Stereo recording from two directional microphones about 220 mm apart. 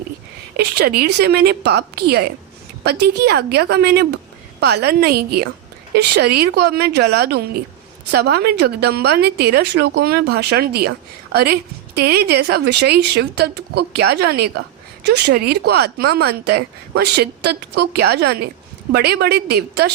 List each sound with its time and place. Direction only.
0.5 s a woman's voice: 45° right (ahead or behind)